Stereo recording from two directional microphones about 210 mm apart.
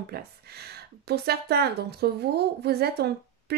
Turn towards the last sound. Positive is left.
turn(degrees=-50)  # may be behind; listen again after turning